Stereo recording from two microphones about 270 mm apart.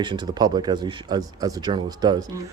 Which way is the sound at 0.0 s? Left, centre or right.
Centre.